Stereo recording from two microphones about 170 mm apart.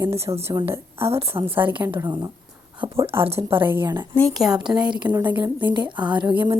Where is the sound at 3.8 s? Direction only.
25° right (ahead or behind).